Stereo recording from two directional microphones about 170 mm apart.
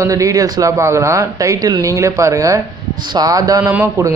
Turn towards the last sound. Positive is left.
turn(degrees=-15)  # may be behind; listen again after turning